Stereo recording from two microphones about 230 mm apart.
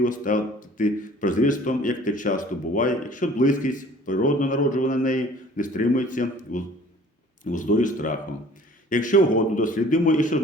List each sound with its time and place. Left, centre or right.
0.0 s speech: left